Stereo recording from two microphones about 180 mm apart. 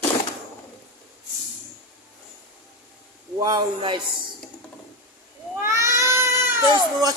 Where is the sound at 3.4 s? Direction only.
20° right (ahead or behind).